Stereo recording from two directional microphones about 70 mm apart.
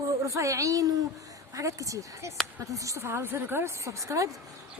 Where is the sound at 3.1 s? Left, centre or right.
Right.